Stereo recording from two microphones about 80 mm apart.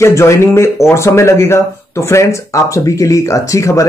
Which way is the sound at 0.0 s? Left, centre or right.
Left.